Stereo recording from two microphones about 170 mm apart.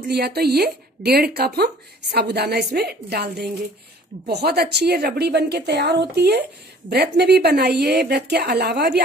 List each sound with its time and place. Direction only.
0.1 s speech: 70° right (ahead or behind)